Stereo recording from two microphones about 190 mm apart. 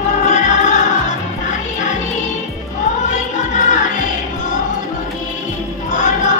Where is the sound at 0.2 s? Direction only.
40° left (ahead or behind).